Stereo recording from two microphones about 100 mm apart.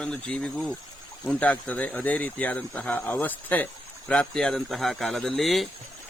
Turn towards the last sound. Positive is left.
turn(degrees=0)  # may be behind; listen again after turning